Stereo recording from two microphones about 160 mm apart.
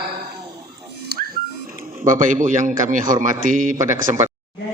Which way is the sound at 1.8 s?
55° right (ahead or behind).